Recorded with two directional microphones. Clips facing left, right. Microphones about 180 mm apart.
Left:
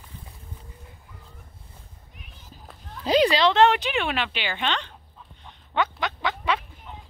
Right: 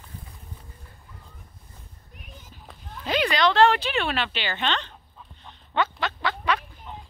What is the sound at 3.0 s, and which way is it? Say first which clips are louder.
Speech: left 4 dB; 35° left (ahead or behind).